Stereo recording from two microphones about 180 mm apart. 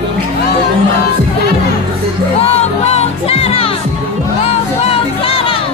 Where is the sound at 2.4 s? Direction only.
35° left (ahead or behind).